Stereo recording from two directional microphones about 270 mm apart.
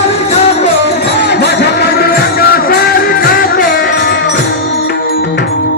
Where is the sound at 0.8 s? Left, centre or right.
Left.